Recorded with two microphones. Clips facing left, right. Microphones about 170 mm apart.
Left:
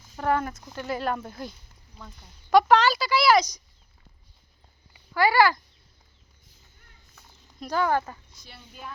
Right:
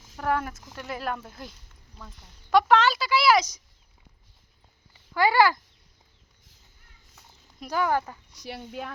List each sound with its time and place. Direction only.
0.2 s speech: centre (ahead or behind)
5.1 s a child's voice: 20° right (ahead or behind)
7.2 s a sound: 10° right (ahead or behind)
8.3 s speech: 80° right